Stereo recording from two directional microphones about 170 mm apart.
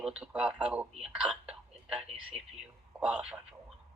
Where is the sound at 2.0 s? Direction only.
35° right (ahead or behind).